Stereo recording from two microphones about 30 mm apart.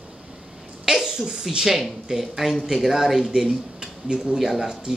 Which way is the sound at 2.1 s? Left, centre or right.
Centre.